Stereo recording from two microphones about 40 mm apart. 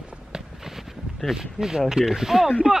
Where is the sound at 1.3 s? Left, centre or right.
Centre.